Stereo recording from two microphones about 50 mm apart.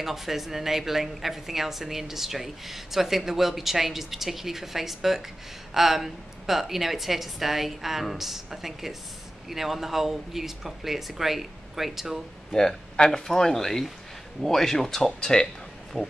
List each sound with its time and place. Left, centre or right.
0.0 s a woman's voice: centre
12.4 s speech: centre
16.0 s a woman's voice: centre